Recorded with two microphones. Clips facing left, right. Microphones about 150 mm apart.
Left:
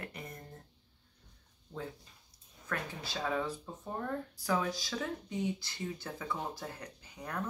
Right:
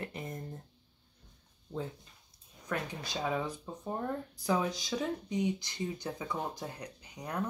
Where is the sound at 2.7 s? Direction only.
15° right (ahead or behind).